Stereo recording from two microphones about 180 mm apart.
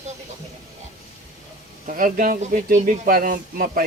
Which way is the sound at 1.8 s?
50° right (ahead or behind).